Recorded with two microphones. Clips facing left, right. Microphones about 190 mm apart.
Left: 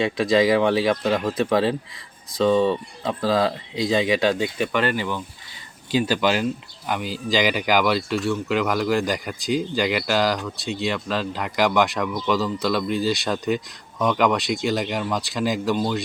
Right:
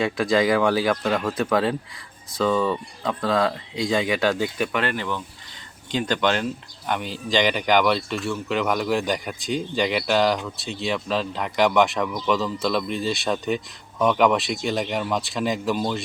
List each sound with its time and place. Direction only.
0.4 s speech: 25° left (ahead or behind)
2.4 s speech: 30° left (ahead or behind)
4.6 s speech: centre (ahead or behind)